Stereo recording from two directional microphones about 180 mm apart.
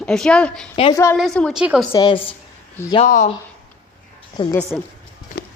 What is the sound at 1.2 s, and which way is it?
Speech, 5° left (ahead or behind).